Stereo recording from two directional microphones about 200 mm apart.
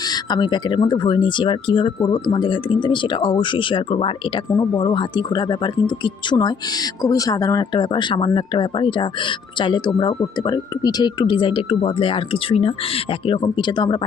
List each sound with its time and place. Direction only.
0.1 s speech: 20° left (ahead or behind)